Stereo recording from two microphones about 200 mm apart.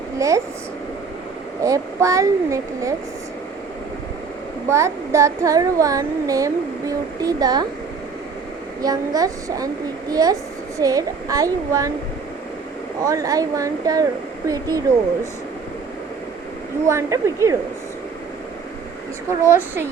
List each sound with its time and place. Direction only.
0.2 s child singing: 15° right (ahead or behind)
1.6 s child singing: 15° right (ahead or behind)
4.7 s child singing: 15° right (ahead or behind)
8.8 s child singing: 20° right (ahead or behind)
10.1 s a woman's voice: 20° right (ahead or behind)
10.8 s child singing: 15° right (ahead or behind)
13.0 s child singing: 15° right (ahead or behind)
16.8 s child singing: 15° right (ahead or behind)